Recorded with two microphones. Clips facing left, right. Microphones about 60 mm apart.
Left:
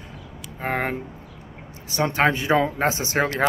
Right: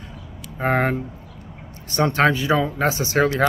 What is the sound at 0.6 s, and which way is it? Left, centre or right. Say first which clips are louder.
Speech: right 5 dB; centre.